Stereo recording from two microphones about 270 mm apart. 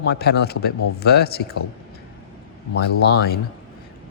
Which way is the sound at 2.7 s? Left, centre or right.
Left.